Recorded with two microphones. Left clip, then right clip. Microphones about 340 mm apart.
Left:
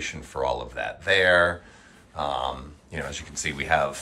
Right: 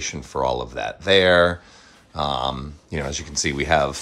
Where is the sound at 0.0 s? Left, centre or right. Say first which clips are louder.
Right 4 dB; centre.